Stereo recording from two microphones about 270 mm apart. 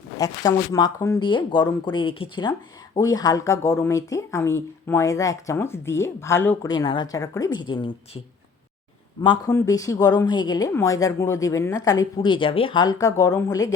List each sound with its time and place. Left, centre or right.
0.2 s speech: centre
9.2 s speech: centre